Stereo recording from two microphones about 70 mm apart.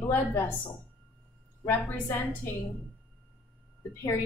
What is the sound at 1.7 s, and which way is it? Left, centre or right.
Speech, left.